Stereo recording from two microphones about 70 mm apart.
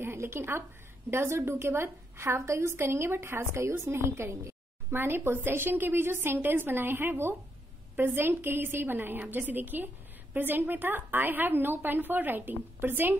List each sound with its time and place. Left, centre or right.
0.0 s a woman's voice: right